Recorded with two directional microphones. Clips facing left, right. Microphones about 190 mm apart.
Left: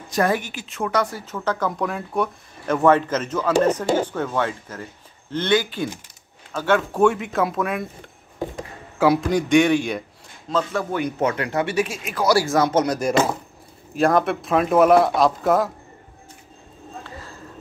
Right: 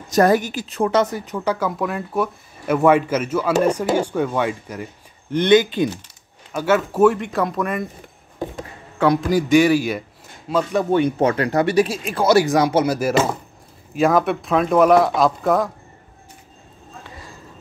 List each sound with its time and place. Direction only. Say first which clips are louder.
0.1 s a woman's voice: right 6 dB; 40° right (ahead or behind); by 5.9 s 20° right (ahead or behind)
6.5 s speech: right 2 dB; 5° right (ahead or behind)
8.9 s speech: right 1 dB; 5° left (ahead or behind)
10.5 s speech: right 5 dB; 20° right (ahead or behind); by 15.7 s centre (ahead or behind)